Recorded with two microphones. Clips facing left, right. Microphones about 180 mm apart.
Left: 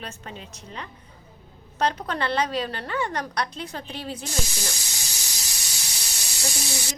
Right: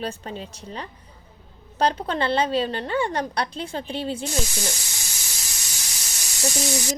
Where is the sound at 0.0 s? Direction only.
35° right (ahead or behind).